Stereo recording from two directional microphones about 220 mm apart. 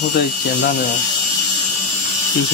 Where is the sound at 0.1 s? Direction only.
45° left (ahead or behind).